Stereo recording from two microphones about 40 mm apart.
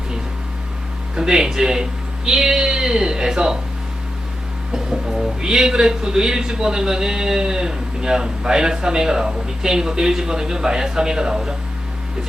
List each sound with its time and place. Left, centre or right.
1.1 s speech: centre
4.7 s a man's voice: centre